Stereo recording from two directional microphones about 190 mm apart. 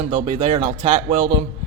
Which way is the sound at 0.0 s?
35° right (ahead or behind).